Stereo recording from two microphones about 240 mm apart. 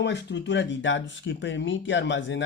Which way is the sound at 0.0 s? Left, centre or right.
Left.